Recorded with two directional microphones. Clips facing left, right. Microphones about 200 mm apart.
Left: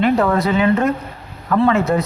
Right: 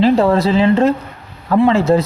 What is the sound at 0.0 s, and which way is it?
Speech, 30° right (ahead or behind).